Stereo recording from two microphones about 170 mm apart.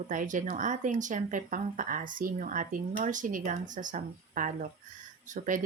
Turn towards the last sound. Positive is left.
turn(degrees=-50)  # may be behind; listen again after turning